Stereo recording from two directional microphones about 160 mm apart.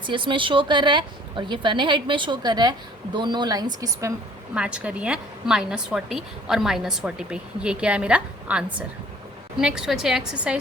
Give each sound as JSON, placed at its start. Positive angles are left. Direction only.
{"t": 0.0, "sound": "speech", "side_deg": -30}
{"t": 4.5, "sound": "a woman's voice", "side_deg": -5}